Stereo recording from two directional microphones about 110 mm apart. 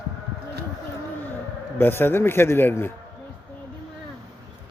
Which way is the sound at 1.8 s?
20° left (ahead or behind).